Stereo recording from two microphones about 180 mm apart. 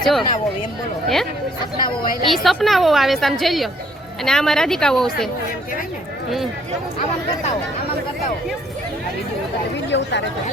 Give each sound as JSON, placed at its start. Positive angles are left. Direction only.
{"t": 0.0, "sound": "a woman's voice", "side_deg": 0}
{"t": 9.9, "sound": "speech", "side_deg": 75}